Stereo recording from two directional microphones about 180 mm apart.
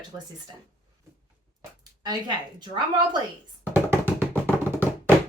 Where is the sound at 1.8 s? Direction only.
25° right (ahead or behind).